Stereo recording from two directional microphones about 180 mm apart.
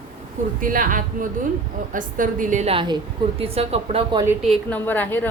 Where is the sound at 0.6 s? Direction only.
50° right (ahead or behind); by 4.3 s 30° right (ahead or behind).